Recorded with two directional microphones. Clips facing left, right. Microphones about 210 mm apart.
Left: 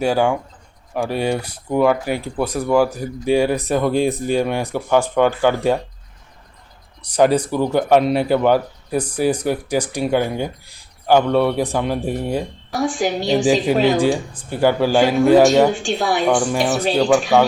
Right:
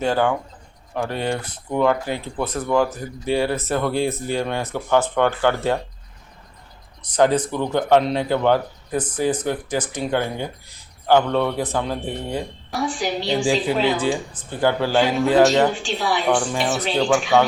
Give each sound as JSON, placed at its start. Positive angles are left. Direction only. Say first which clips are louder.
{"t": 0.0, "sound": "speech", "louder": "left 3 dB", "side_deg": 10}
{"t": 7.0, "sound": "speech", "louder": "left 2 dB", "side_deg": 10}
{"t": 12.8, "sound": "a woman's voice", "louder": "left 4 dB", "side_deg": 45}
{"t": 14.3, "sound": "speech", "louder": "left 4 dB", "side_deg": 10}
{"t": 15.8, "sound": "a woman's voice", "louder": "left 3 dB", "side_deg": 45}
{"t": 16.3, "sound": "speech", "louder": "left 3 dB", "side_deg": 10}